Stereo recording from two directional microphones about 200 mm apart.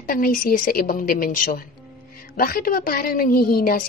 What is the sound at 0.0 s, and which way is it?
A woman's voice, 45° left (ahead or behind).